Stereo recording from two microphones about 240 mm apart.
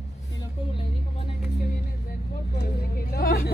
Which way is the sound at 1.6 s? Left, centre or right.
Left.